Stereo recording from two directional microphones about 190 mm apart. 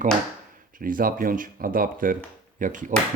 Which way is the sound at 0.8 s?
45° right (ahead or behind).